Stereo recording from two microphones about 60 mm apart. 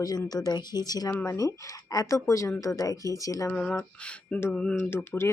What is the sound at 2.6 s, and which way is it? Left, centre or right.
Speech, left.